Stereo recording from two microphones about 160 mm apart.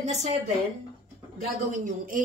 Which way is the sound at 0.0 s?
45° right (ahead or behind).